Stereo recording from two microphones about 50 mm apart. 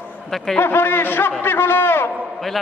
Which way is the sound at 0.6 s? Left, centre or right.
Left.